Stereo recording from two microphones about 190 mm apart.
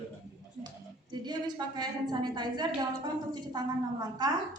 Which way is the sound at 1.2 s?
20° right (ahead or behind).